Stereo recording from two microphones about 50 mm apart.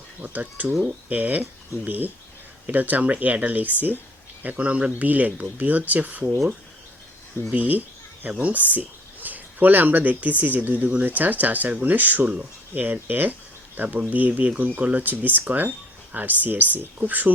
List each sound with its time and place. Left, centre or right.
0.2 s speech: right
7.5 s speech: right